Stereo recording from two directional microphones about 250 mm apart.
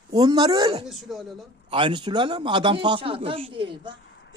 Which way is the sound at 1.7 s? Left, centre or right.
Centre.